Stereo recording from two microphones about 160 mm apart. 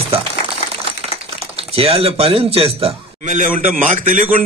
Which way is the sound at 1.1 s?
40° right (ahead or behind).